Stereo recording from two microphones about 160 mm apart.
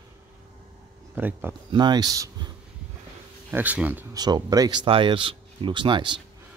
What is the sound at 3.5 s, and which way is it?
Speech, 10° right (ahead or behind).